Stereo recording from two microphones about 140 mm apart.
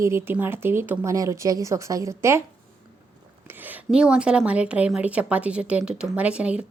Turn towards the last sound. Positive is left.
turn(degrees=-10)  # may be behind; listen again after turning